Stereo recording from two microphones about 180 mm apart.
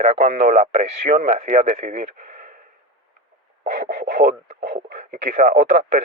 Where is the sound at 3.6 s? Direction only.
45° right (ahead or behind).